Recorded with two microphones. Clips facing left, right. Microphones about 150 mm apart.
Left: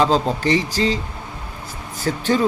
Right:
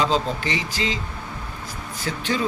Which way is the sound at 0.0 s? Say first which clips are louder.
Left 5 dB; 40° left (ahead or behind).